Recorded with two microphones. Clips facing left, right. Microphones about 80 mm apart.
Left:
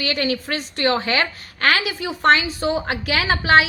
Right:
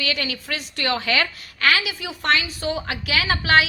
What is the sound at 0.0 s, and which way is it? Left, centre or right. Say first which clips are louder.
A woman's voice: left 5 dB; left.